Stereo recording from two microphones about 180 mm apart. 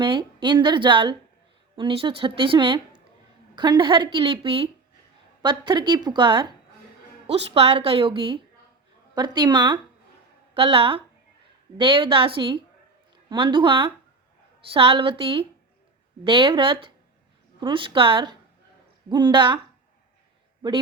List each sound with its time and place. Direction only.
0.0 s a woman's voice: 25° right (ahead or behind)